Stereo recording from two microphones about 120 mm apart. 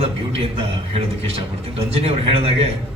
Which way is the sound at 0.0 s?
55° right (ahead or behind).